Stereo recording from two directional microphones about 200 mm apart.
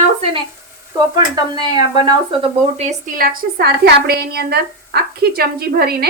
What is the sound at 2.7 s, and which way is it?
A woman's voice, 40° right (ahead or behind).